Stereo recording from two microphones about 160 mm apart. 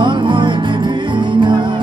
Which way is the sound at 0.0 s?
30° right (ahead or behind).